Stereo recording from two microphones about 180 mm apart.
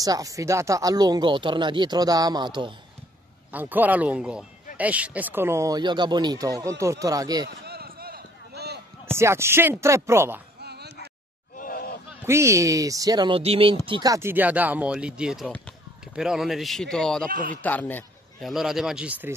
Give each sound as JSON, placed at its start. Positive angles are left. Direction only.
{"t": 0.0, "sound": "speech", "side_deg": -20}
{"t": 3.5, "sound": "speech", "side_deg": -10}
{"t": 7.6, "sound": "run", "side_deg": -60}
{"t": 9.0, "sound": "speech", "side_deg": -15}
{"t": 10.6, "sound": "a sound", "side_deg": -65}
{"t": 11.5, "sound": "a sound", "side_deg": 50}
{"t": 12.3, "sound": "speech", "side_deg": -15}
{"t": 17.3, "sound": "speech", "side_deg": -50}
{"t": 17.6, "sound": "a man's voice", "side_deg": 10}
{"t": 18.5, "sound": "speech", "side_deg": 0}